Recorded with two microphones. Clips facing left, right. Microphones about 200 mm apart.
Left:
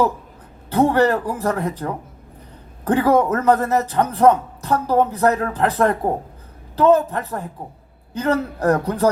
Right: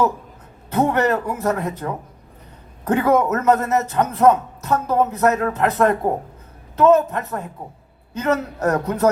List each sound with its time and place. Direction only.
0.7 s a man's voice: 30° left (ahead or behind)